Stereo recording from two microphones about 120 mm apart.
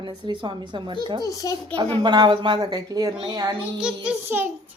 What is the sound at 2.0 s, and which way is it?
A woman's voice, 35° right (ahead or behind).